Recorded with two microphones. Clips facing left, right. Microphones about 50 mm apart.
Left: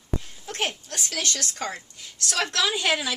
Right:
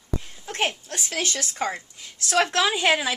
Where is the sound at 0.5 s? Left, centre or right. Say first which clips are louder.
Right 3 dB; right.